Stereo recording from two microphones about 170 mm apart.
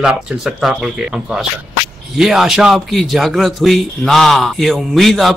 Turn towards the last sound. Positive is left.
turn(degrees=0)  # may be behind; listen again after turning